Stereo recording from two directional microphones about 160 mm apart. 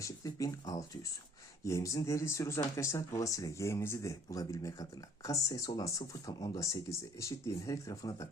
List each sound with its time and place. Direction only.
0.0 s speech: 20° left (ahead or behind)